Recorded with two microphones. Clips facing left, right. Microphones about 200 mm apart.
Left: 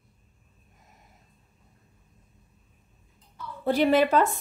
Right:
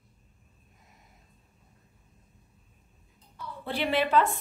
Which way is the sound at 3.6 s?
45° left (ahead or behind).